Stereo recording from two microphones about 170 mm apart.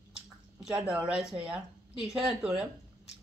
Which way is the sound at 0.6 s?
5° right (ahead or behind).